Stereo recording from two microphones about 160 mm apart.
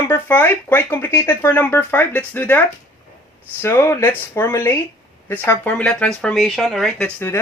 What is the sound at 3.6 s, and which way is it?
Speech, 15° left (ahead or behind).